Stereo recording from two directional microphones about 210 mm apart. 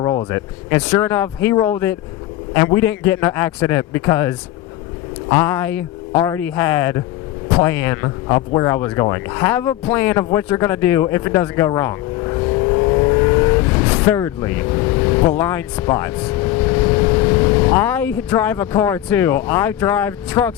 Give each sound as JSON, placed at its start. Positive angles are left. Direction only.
{"t": 0.0, "sound": "speech", "side_deg": 20}
{"t": 10.3, "sound": "vehicle", "side_deg": 10}
{"t": 18.3, "sound": "speech", "side_deg": 15}